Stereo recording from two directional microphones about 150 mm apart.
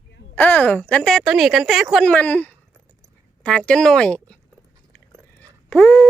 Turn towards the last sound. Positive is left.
turn(degrees=10)  # may be behind; listen again after turning